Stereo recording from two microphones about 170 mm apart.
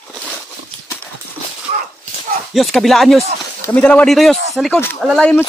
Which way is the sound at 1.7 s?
40° right (ahead or behind).